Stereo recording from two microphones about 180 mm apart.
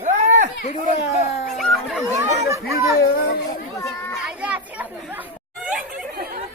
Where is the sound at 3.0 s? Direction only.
60° left (ahead or behind).